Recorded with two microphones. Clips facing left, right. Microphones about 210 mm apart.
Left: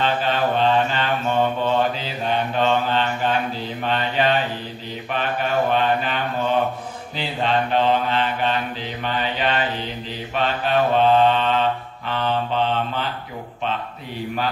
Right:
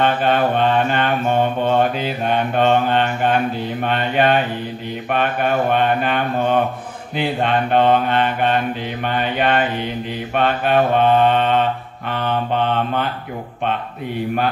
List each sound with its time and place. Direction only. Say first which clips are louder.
0.0 s mantra: right 4 dB; 55° right (ahead or behind)